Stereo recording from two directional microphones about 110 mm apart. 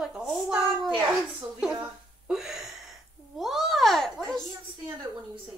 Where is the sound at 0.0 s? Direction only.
10° right (ahead or behind).